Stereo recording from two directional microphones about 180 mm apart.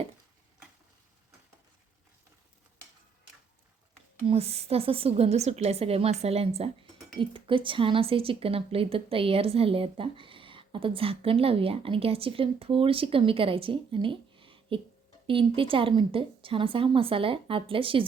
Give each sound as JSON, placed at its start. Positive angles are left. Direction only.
{"t": 4.3, "sound": "a woman's voice", "side_deg": -35}